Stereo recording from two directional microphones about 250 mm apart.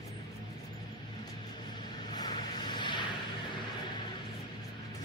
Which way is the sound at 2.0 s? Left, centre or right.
Centre.